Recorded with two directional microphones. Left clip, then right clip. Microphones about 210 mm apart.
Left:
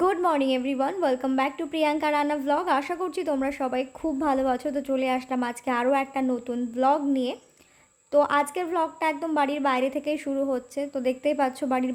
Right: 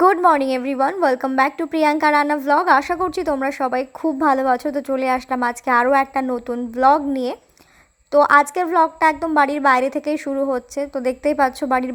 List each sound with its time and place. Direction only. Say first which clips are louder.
0.0 s a woman's voice: right 9 dB; 15° right (ahead or behind)